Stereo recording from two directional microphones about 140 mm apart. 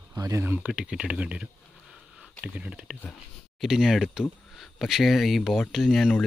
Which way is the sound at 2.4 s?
10° right (ahead or behind).